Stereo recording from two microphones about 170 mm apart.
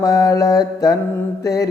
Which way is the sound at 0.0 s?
20° left (ahead or behind).